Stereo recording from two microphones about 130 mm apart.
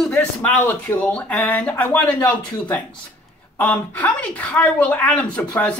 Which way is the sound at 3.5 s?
10° left (ahead or behind).